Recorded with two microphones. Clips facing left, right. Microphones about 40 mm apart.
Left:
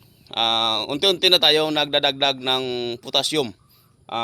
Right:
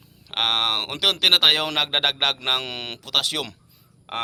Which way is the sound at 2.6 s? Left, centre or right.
Right.